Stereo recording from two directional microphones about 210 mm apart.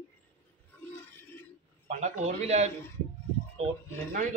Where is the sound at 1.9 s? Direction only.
35° right (ahead or behind).